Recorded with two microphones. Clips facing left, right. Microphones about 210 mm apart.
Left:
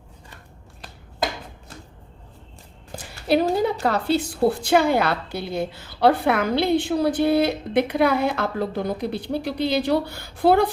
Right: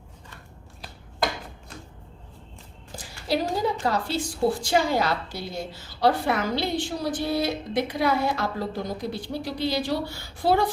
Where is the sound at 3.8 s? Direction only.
60° left (ahead or behind).